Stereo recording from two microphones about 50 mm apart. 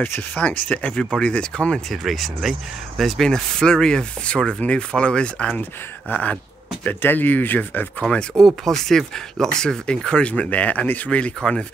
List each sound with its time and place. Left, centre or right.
0.4 s speech: left
1.9 s speech: centre; by 7.9 s left
8.1 s speech: centre